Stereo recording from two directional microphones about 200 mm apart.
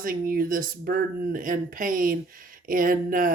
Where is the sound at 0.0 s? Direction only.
45° right (ahead or behind).